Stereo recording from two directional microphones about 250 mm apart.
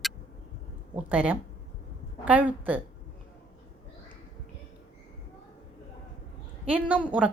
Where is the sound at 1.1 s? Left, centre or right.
Centre.